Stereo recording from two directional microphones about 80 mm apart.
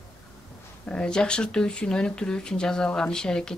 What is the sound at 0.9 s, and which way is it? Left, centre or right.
Speech, centre.